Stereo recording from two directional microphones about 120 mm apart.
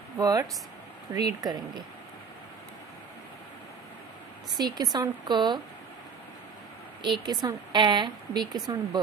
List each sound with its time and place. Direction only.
0.2 s a woman's voice: 30° right (ahead or behind)
4.5 s a woman's voice: 35° right (ahead or behind)
7.0 s a woman's voice: 40° right (ahead or behind)